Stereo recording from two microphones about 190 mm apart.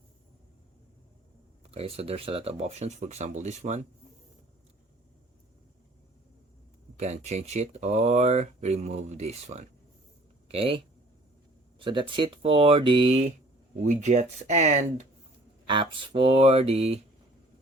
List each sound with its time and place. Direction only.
1.6 s speech: 30° right (ahead or behind)
6.9 s speech: 35° right (ahead or behind)
11.8 s speech: 25° right (ahead or behind)
15.6 s speech: 25° right (ahead or behind)